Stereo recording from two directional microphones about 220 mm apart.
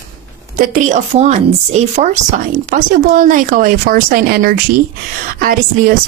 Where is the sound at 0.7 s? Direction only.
30° right (ahead or behind).